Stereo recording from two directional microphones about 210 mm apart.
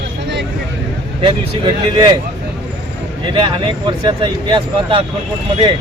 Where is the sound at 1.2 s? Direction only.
25° right (ahead or behind).